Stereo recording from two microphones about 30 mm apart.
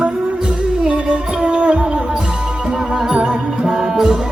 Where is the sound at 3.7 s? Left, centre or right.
Centre.